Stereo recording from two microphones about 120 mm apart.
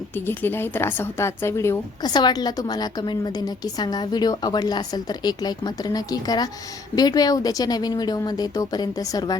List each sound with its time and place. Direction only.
0.3 s a woman's voice: 20° left (ahead or behind)
2.0 s a woman's voice: 35° left (ahead or behind)